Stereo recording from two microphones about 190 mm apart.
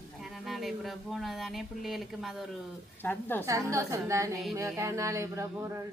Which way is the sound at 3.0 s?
10° left (ahead or behind).